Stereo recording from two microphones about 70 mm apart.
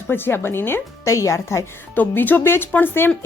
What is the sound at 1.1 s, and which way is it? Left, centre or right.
Speech, left.